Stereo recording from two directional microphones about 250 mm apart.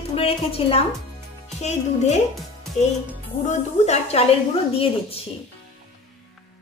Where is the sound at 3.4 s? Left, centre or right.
Left.